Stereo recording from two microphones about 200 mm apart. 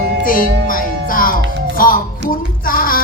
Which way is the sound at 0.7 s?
45° left (ahead or behind).